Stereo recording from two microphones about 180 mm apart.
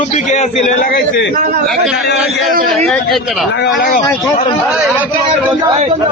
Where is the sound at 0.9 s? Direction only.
60° left (ahead or behind).